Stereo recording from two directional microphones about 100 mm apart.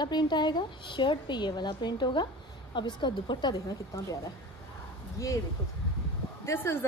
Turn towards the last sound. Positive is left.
turn(degrees=25)  # may be behind; listen again after turning